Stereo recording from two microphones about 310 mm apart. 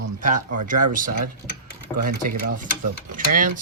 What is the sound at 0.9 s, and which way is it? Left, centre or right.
Speech, right.